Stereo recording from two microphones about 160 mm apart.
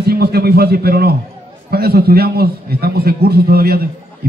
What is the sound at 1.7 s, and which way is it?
A man's voice, 75° right (ahead or behind).